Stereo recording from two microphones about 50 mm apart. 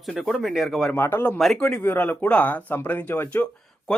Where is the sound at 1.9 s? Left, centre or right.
Left.